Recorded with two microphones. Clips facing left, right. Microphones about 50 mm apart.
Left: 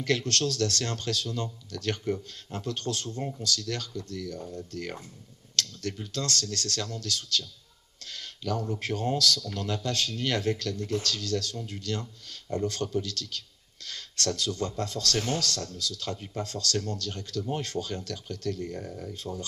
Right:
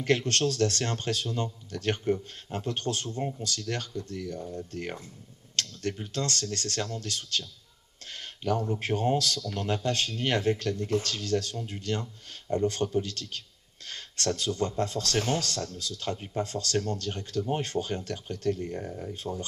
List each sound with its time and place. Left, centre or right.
0.0 s speech: right